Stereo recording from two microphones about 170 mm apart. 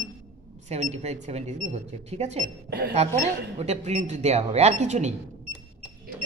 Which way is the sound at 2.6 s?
65° right (ahead or behind).